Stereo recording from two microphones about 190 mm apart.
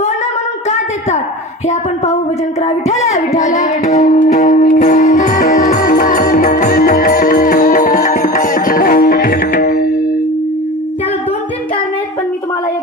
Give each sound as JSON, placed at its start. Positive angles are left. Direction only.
{"t": 2.6, "sound": "speech", "side_deg": 35}
{"t": 3.1, "sound": "music", "side_deg": 35}